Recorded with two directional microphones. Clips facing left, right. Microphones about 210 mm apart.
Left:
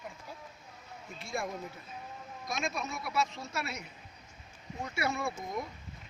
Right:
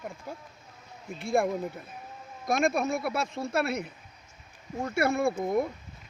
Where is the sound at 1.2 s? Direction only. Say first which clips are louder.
Right 11 dB; 55° right (ahead or behind).